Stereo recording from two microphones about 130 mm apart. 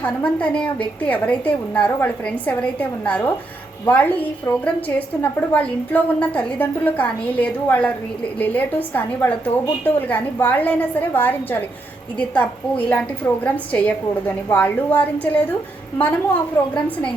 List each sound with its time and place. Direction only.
0.0 s a woman's voice: 10° left (ahead or behind)